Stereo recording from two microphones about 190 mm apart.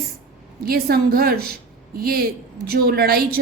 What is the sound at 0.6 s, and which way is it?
A woman's voice, 50° right (ahead or behind).